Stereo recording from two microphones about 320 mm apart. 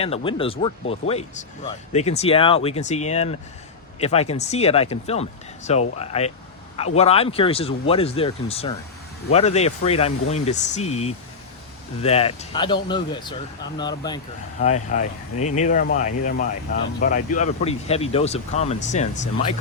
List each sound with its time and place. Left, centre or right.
0.0 s speech: centre